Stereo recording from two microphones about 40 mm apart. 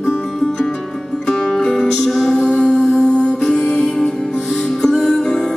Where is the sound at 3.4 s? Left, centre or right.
Centre.